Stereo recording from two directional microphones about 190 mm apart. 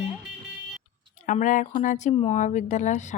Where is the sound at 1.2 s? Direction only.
40° left (ahead or behind).